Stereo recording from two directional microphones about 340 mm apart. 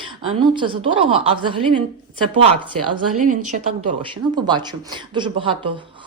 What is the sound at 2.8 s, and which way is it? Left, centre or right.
Speech, right.